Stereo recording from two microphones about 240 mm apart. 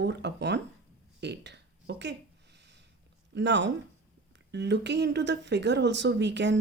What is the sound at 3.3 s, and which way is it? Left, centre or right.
Speech, right.